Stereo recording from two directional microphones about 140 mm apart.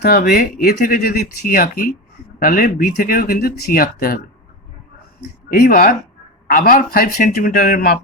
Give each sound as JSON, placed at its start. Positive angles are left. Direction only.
{"t": 0.1, "sound": "speech", "side_deg": 90}
{"t": 5.5, "sound": "speech", "side_deg": 90}
{"t": 6.5, "sound": "a man's voice", "side_deg": 80}